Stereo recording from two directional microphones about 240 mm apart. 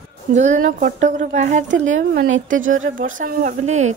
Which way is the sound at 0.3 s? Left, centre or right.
Right.